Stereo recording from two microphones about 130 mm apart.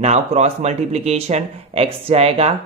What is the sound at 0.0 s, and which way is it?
Speech, 60° right (ahead or behind).